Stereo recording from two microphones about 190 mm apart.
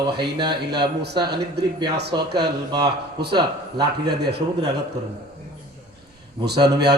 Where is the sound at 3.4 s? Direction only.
20° right (ahead or behind).